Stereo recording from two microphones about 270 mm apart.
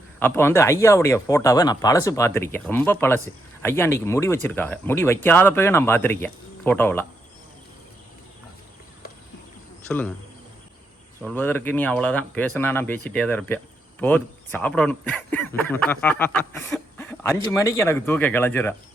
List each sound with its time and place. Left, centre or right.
0.2 s speech: centre
11.2 s speech: centre